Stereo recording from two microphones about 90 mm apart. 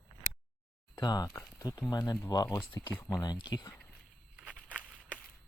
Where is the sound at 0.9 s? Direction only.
50° left (ahead or behind).